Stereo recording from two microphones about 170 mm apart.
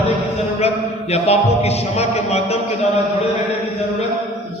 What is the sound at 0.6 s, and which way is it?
A man's voice, 40° left (ahead or behind).